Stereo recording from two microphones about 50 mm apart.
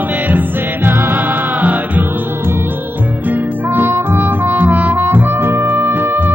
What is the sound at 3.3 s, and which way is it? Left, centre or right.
Music, right.